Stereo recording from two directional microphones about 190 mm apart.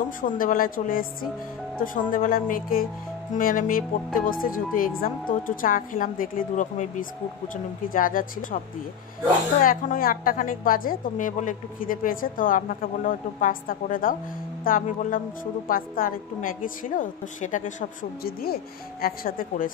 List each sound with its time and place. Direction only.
0.2 s a woman's voice: 45° left (ahead or behind)
9.6 s a woman's voice: 45° left (ahead or behind)